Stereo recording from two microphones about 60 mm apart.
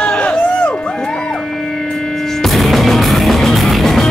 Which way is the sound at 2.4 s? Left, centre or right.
Centre.